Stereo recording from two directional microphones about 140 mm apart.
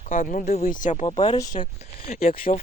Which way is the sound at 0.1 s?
80° left.